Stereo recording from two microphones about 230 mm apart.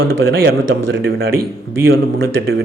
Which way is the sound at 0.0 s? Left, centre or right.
Right.